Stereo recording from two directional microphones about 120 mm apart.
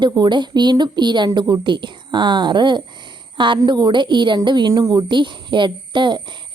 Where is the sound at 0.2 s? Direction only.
40° right (ahead or behind).